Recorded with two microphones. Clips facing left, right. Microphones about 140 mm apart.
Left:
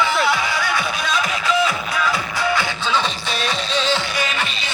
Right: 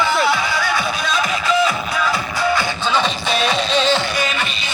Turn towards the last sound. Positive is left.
turn(degrees=-65)  # may be behind; listen again after turning